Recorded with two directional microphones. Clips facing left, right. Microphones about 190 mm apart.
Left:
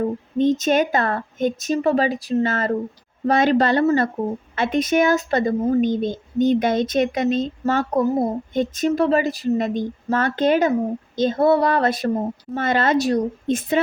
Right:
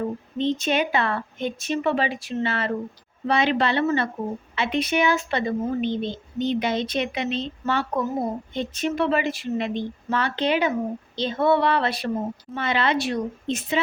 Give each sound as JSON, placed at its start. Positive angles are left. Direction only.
{"t": 0.3, "sound": "speech", "side_deg": 45}
{"t": 13.5, "sound": "speech", "side_deg": 50}